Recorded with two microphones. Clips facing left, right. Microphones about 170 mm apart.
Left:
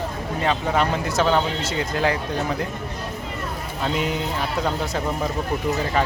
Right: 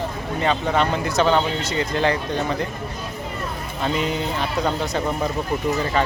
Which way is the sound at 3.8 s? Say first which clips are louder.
Right 1 dB; 5° left (ahead or behind).